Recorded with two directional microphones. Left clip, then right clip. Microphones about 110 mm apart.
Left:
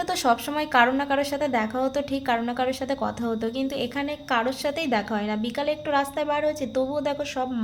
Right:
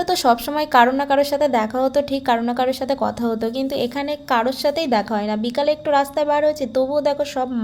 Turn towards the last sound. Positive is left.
turn(degrees=-45)  # may be behind; listen again after turning